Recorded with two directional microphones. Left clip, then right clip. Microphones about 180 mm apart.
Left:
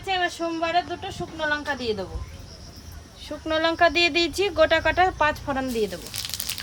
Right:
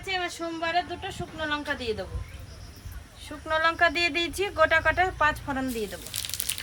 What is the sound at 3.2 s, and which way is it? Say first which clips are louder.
Speech: left 1 dB; 90° left.